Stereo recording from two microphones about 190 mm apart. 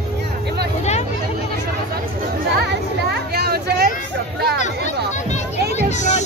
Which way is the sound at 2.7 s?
60° right (ahead or behind).